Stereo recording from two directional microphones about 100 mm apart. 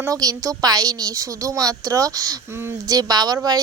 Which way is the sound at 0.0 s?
35° right (ahead or behind).